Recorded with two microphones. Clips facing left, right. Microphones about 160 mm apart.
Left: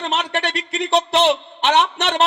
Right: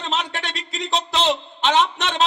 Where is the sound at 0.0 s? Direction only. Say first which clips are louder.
Left 4 dB; 65° left (ahead or behind).